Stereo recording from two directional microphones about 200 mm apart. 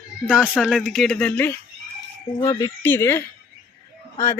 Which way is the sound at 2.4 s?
20° left (ahead or behind).